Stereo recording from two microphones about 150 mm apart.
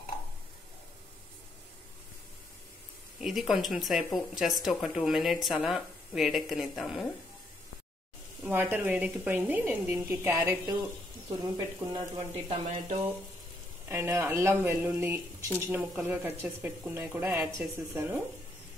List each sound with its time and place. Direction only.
3.2 s speech: centre (ahead or behind)
8.4 s speech: 10° right (ahead or behind)
12.4 s speech: 50° right (ahead or behind)
13.8 s speech: 15° right (ahead or behind)